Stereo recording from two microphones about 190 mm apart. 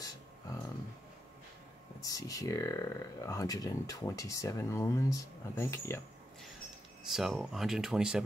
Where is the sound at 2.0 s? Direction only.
20° left (ahead or behind).